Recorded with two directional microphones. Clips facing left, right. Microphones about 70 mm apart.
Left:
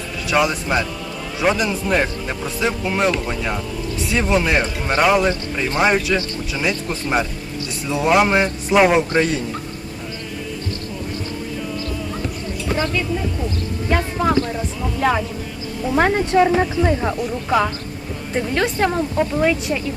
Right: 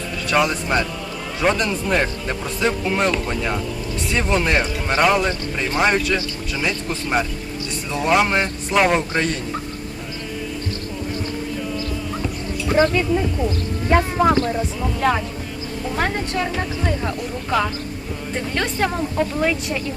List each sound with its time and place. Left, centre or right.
0.3 s speech: centre
12.8 s speech: right
15.0 s speech: centre
16.0 s speech: left; by 19.8 s centre